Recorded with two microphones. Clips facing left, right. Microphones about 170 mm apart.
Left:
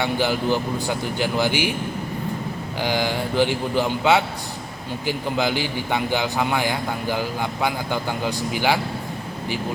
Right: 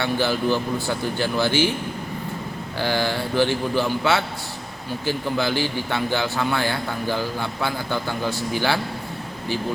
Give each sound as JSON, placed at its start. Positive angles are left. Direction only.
{"t": 0.0, "sound": "a man's voice", "side_deg": 15}
{"t": 2.8, "sound": "a man's voice", "side_deg": 15}